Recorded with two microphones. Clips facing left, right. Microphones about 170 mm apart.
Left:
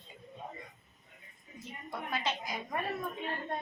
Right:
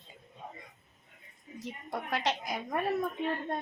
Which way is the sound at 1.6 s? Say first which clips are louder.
Right 4 dB; 80° right.